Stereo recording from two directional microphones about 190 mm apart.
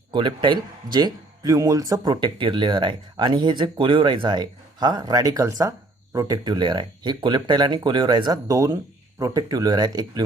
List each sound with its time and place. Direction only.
0.1 s speech: 25° right (ahead or behind)